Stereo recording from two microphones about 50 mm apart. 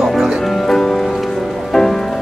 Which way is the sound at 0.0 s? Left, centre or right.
Centre.